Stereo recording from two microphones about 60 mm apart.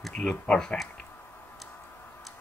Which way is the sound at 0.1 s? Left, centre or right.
Centre.